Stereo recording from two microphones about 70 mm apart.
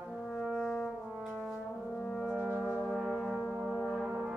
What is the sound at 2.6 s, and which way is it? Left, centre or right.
Brass instrument, centre.